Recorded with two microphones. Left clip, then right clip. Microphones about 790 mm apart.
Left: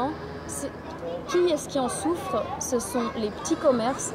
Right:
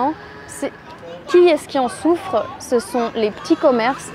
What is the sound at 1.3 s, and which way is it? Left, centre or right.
Speech, right.